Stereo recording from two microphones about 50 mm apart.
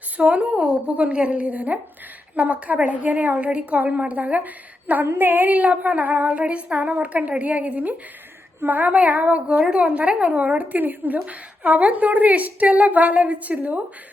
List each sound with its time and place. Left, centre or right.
0.2 s speech: right
2.3 s child singing: right
5.0 s child singing: right
9.6 s speech: centre